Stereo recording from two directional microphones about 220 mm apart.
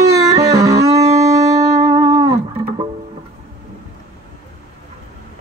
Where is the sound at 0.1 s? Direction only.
15° right (ahead or behind).